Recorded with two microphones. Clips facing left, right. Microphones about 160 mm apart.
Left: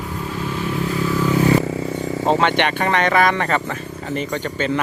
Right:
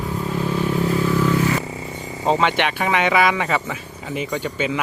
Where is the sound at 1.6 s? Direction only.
90° left.